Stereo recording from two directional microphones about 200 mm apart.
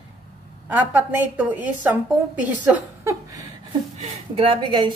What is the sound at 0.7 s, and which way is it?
A woman's voice, 10° right (ahead or behind).